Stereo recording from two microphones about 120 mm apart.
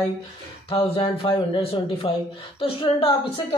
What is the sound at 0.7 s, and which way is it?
A woman's voice, 50° left (ahead or behind).